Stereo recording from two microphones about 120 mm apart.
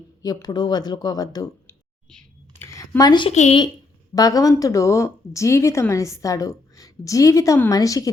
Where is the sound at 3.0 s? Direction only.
35° left (ahead or behind).